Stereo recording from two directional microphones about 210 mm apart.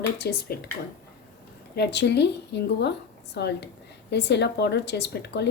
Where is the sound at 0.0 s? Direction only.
50° left (ahead or behind).